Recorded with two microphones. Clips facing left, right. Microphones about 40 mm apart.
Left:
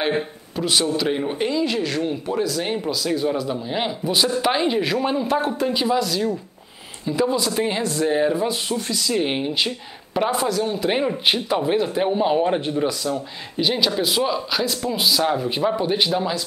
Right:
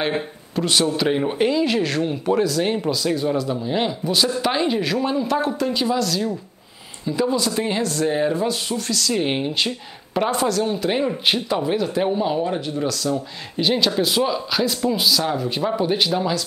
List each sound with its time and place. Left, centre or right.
0.0 s a man's voice: centre
9.1 s speech: centre
10.8 s speech: centre; by 12.8 s left
12.8 s speech: centre
13.6 s speech: centre
15.0 s speech: centre